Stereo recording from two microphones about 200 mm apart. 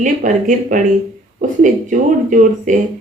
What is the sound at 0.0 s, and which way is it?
A woman's voice, 40° right (ahead or behind).